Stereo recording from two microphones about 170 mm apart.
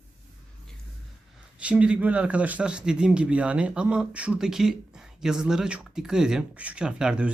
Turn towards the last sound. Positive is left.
turn(degrees=-5)  # may be behind; listen again after turning